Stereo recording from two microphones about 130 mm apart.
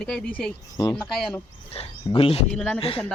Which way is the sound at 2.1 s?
45° left (ahead or behind).